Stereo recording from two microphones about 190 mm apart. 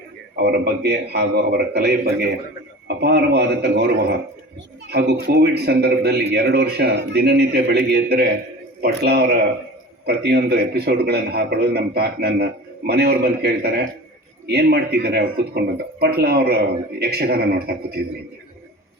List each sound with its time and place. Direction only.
0.3 s a man's voice: 60° right (ahead or behind)